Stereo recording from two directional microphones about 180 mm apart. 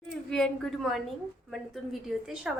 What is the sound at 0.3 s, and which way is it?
A woman's voice, 5° left (ahead or behind).